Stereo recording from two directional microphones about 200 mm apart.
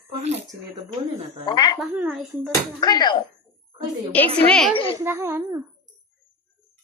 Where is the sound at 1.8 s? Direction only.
5° right (ahead or behind).